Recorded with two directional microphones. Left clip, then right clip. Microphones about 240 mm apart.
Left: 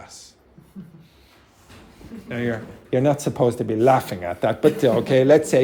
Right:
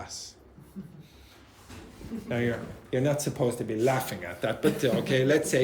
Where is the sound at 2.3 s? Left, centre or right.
Centre.